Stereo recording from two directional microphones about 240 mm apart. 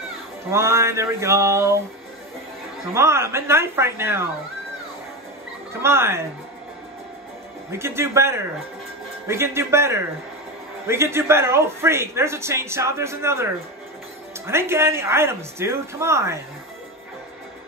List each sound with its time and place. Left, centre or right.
0.5 s speech: centre
2.9 s speech: centre
5.7 s speech: centre
7.7 s speech: centre